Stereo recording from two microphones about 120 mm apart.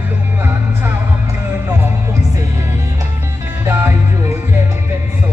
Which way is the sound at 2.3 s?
25° right (ahead or behind).